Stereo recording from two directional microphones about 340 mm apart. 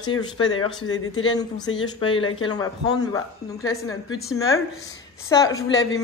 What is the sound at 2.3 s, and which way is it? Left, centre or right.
A woman's voice, centre.